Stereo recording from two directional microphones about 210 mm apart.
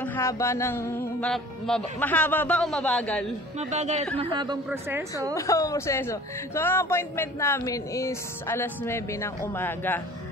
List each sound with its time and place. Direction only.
0.0 s speech: 10° left (ahead or behind)
3.5 s speech: 35° right (ahead or behind)
4.2 s speech: 20° right (ahead or behind)
4.6 s speech: 10° right (ahead or behind)
5.3 s speech: 15° left (ahead or behind)